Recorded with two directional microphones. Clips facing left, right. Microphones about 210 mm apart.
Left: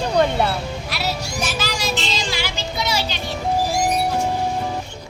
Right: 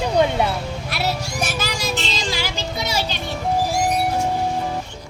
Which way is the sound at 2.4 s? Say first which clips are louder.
Even; 45° right (ahead or behind).